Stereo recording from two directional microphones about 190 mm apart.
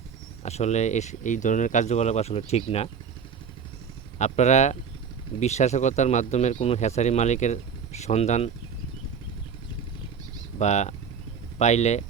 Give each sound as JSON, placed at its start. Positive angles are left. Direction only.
{"t": 0.4, "sound": "speech", "side_deg": 35}
{"t": 4.2, "sound": "speech", "side_deg": 35}
{"t": 10.6, "sound": "speech", "side_deg": 40}